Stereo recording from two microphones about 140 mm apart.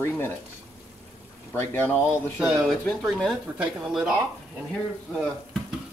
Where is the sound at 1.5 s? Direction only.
15° left (ahead or behind).